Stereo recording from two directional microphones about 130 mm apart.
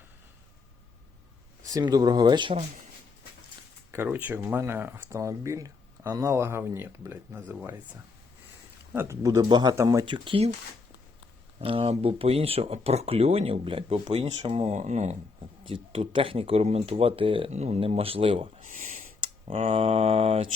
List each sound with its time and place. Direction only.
1.6 s speech: 30° right (ahead or behind)
3.9 s speech: 15° right (ahead or behind)
8.9 s speech: 20° right (ahead or behind); by 10.5 s 45° right (ahead or behind)
11.6 s speech: 45° right (ahead or behind); by 15.1 s 65° right (ahead or behind)
15.7 s speech: 40° right (ahead or behind)
17.5 s speech: 55° right (ahead or behind)
18.6 s speech: 80° right
19.5 s speech: 50° right (ahead or behind)